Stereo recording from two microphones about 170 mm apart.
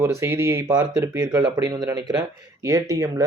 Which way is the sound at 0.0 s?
15° right (ahead or behind).